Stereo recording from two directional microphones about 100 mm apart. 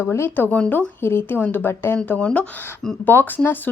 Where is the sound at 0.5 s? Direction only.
10° left (ahead or behind).